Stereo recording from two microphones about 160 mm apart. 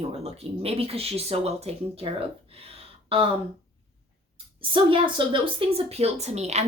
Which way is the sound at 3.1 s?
35° right (ahead or behind).